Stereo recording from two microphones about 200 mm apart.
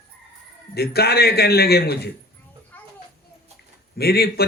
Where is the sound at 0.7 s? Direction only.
50° left (ahead or behind).